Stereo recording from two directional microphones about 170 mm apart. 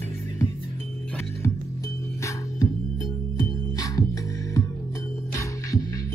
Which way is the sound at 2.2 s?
20° left (ahead or behind).